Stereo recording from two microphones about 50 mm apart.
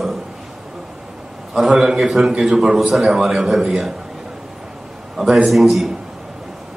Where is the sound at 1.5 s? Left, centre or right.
Centre.